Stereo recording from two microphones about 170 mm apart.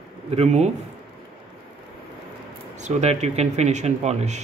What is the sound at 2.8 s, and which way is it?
Speech, 40° right (ahead or behind).